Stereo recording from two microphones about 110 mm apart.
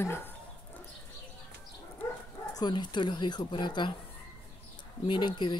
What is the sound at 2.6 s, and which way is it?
Speech, 45° left (ahead or behind).